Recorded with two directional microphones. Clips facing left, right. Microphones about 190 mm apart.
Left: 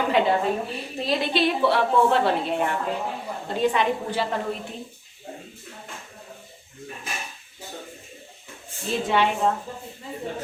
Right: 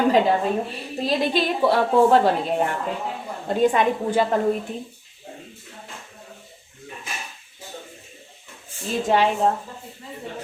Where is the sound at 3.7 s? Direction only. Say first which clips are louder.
Right 4 dB; 50° right (ahead or behind).